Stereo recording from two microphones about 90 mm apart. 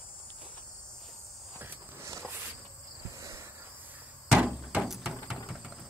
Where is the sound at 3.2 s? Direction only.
35° right (ahead or behind).